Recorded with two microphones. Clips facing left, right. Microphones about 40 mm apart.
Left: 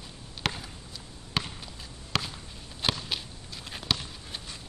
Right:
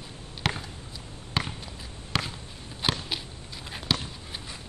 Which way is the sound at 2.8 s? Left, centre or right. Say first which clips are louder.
Right 1 dB; centre.